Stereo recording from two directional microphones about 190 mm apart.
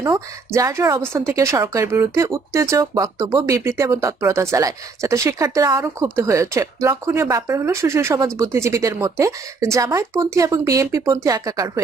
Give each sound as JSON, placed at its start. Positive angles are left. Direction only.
{"t": 0.0, "sound": "a woman's voice", "side_deg": -15}